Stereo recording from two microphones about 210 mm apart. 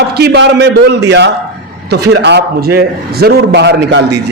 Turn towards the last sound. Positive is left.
turn(degrees=-55)  # may be behind; listen again after turning